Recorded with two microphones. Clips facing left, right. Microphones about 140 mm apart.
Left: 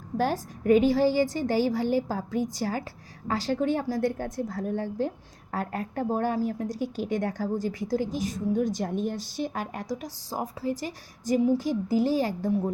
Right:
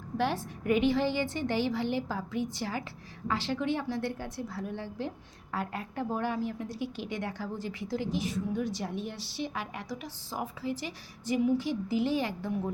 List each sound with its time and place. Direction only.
0.2 s a woman's voice: 40° left (ahead or behind)